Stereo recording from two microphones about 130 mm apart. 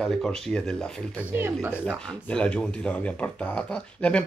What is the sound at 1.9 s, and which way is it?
Speech, 5° left (ahead or behind).